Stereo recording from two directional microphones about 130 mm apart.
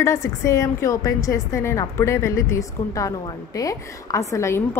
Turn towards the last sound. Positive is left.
turn(degrees=20)  # may be behind; listen again after turning